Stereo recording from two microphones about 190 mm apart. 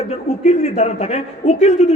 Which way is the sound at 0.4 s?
35° left (ahead or behind).